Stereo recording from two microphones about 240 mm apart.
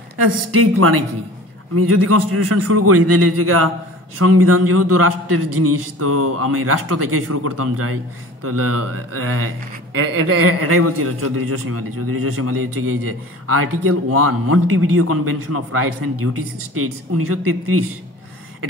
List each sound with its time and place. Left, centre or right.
0.5 s a man's voice: right